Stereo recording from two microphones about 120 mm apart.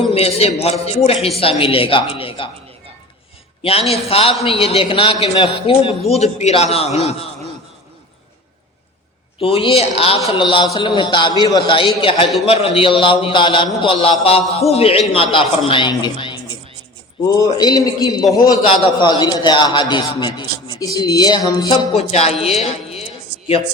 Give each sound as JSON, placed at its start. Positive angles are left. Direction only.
{"t": 0.1, "sound": "a man's voice", "side_deg": 55}
{"t": 3.6, "sound": "a man's voice", "side_deg": 55}
{"t": 6.1, "sound": "a man's voice", "side_deg": 65}
{"t": 9.4, "sound": "a man's voice", "side_deg": 50}
{"t": 10.5, "sound": "a man's voice", "side_deg": 45}
{"t": 17.2, "sound": "a man's voice", "side_deg": 30}
{"t": 21.9, "sound": "a man's voice", "side_deg": 60}